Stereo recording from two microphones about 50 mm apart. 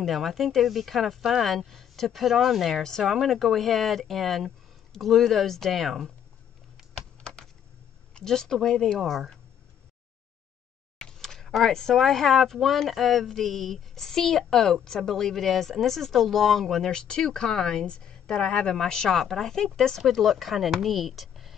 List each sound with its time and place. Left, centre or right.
0.0 s speech: centre
7.0 s typing: centre
8.2 s speech: centre
11.0 s a sound: centre
11.7 s speech: centre